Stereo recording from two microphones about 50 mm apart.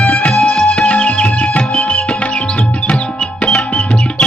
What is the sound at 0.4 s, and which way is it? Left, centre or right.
Music, centre.